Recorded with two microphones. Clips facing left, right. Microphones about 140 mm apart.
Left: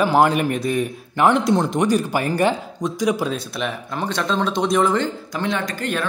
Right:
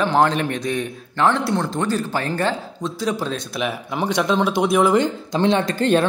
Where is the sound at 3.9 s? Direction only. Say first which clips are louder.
Right 4 dB; 15° right (ahead or behind).